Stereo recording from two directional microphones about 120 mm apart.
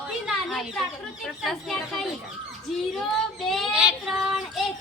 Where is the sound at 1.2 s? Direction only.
Centre (ahead or behind).